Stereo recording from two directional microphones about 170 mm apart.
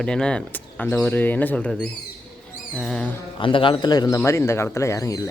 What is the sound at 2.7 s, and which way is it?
Music, 5° left (ahead or behind).